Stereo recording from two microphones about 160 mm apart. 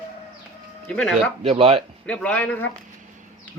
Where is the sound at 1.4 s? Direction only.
35° right (ahead or behind).